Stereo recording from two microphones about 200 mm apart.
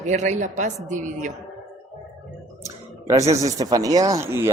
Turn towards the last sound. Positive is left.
turn(degrees=-15)  # may be behind; listen again after turning